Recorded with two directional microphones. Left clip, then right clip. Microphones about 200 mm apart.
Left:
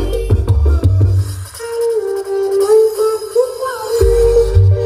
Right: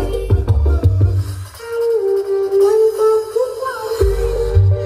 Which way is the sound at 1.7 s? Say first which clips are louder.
Right 1 dB; 60° left (ahead or behind).